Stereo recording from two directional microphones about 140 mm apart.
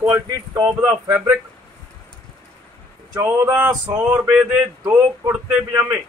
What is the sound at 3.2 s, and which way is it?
Speech, 15° right (ahead or behind).